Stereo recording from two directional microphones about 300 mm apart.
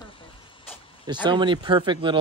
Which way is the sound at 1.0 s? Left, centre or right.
Centre.